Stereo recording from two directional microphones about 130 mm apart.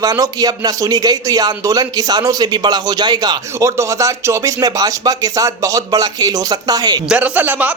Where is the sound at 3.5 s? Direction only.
20° right (ahead or behind).